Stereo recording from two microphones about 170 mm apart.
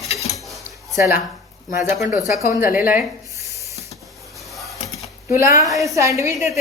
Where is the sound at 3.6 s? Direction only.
20° right (ahead or behind).